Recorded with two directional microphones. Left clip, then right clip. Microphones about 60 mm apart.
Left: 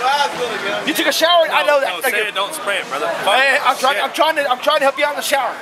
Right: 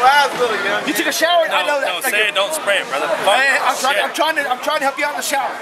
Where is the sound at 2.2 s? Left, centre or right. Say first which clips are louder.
Right 3 dB; centre.